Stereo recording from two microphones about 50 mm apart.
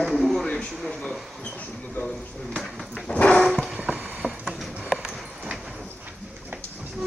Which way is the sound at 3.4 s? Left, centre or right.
Centre.